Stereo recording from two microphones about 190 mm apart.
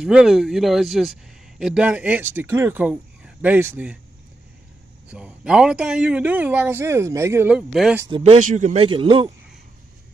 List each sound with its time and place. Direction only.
0.0 s speech: 5° right (ahead or behind)
5.1 s speech: 5° right (ahead or behind)
8.2 s a man's voice: 35° right (ahead or behind)